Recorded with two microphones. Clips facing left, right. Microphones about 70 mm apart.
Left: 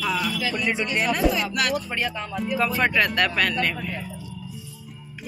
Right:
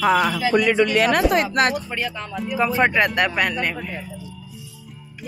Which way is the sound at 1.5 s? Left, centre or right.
Right.